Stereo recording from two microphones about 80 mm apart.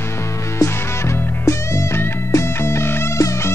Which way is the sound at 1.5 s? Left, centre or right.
Left.